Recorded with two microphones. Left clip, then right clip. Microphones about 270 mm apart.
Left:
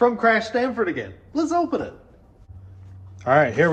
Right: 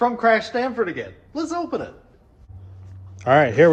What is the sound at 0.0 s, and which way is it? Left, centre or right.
Speech, centre.